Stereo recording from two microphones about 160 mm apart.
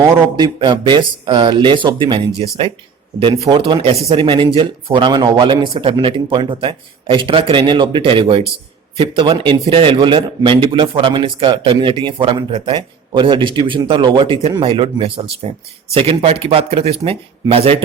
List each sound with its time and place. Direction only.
0.0 s speech: 25° right (ahead or behind)
3.4 s speech: 35° right (ahead or behind)